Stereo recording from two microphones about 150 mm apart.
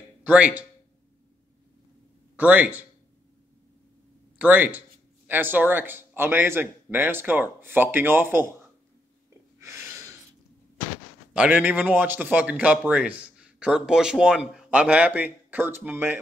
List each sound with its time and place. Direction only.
0.2 s speech: 10° right (ahead or behind)
2.3 s a man's voice: 10° right (ahead or behind)
4.4 s a man's voice: 10° right (ahead or behind)
9.6 s a sound: 15° right (ahead or behind)
11.3 s a man's voice: 10° right (ahead or behind)